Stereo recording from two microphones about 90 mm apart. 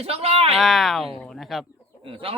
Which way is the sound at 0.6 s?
Centre (ahead or behind).